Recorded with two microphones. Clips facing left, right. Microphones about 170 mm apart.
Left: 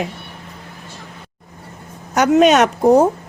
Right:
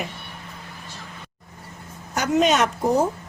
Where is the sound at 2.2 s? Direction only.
70° left (ahead or behind).